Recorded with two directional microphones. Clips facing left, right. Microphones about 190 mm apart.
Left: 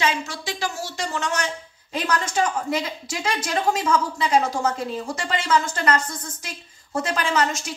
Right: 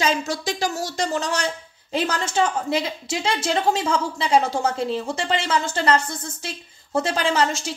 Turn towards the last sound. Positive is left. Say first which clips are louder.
# right 2 dB
turn(degrees=-30)  # may be behind; listen again after turning